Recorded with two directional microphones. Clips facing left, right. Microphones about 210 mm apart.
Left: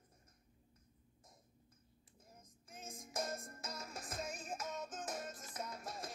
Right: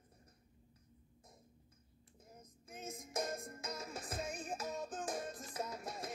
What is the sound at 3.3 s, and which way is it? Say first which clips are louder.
Music: right 2 dB; 15° right (ahead or behind).